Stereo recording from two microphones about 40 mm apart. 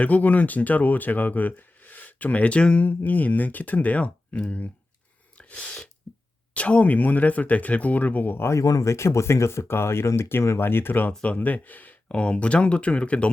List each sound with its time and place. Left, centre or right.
0.0 s speech: left
2.8 s speech: left
5.4 s sneeze: left
6.5 s speech: left
9.0 s speech: left
11.3 s speech: left
12.0 s speech: left